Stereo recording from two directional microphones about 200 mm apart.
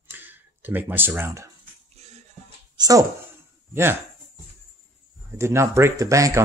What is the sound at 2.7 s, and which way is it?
Speech, 20° right (ahead or behind).